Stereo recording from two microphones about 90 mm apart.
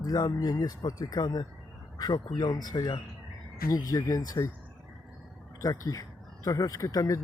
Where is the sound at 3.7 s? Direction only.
40° left (ahead or behind).